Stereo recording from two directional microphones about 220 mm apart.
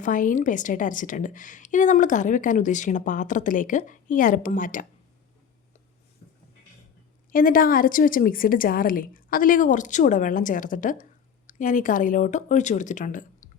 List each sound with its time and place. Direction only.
0.0 s a woman's voice: 35° left (ahead or behind)
7.3 s a woman's voice: 40° left (ahead or behind)